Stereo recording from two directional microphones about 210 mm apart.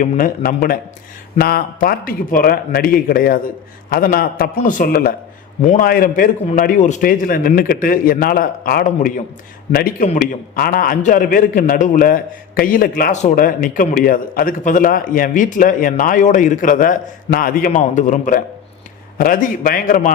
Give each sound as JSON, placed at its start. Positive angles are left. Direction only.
{"t": 0.0, "sound": "a man's voice", "side_deg": 40}